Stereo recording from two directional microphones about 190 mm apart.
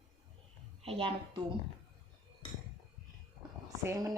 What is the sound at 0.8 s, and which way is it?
Speech, 30° right (ahead or behind).